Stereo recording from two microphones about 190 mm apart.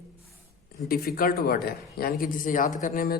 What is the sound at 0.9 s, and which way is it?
A man's voice, 55° left (ahead or behind).